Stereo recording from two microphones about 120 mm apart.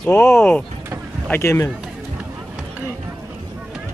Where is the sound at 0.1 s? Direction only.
20° left (ahead or behind).